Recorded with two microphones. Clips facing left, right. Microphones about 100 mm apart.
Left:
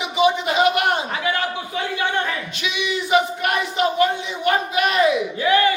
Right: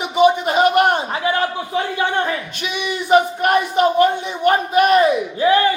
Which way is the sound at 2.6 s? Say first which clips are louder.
Right 4 dB; 50° right (ahead or behind).